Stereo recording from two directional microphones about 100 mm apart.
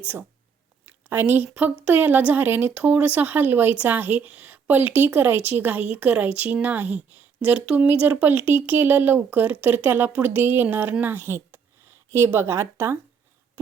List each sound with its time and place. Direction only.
0.0 s a woman's voice: 20° right (ahead or behind)
0.9 s a sound: 20° right (ahead or behind)
1.8 s a woman's voice: 15° right (ahead or behind)